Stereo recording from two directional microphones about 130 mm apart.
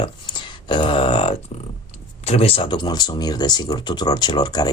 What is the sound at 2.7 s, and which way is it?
Speech, 35° left (ahead or behind).